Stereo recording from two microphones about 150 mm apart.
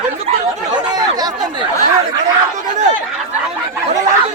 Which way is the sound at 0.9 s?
25° right (ahead or behind).